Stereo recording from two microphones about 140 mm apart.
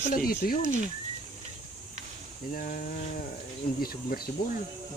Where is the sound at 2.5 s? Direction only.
85° left.